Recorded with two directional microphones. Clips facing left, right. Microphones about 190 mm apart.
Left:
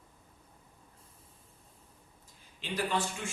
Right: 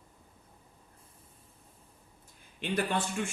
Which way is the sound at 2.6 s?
60° right (ahead or behind).